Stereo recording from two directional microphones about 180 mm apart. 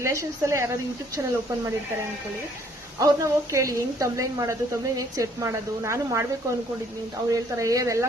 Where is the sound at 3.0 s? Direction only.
15° right (ahead or behind).